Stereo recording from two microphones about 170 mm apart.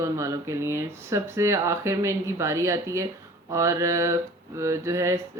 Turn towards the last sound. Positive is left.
turn(degrees=-15)  # may be behind; listen again after turning